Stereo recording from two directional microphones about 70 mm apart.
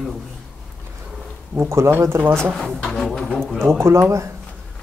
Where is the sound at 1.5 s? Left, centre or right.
Right.